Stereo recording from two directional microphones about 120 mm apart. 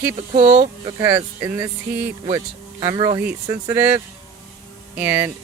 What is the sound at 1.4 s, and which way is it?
Speech, 25° right (ahead or behind).